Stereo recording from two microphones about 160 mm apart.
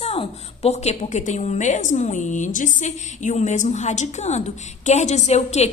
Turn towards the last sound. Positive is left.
turn(degrees=45)  # may be behind; listen again after turning